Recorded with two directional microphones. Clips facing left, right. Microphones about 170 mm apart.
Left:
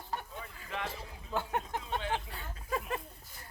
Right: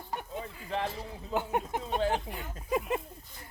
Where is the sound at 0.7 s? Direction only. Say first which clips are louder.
Right 6 dB; 35° right (ahead or behind).